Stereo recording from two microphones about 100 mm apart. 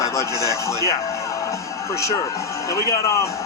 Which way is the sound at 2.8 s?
30° left (ahead or behind).